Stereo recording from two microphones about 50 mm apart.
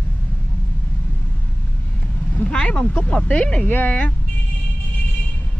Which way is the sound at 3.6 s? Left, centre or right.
Left.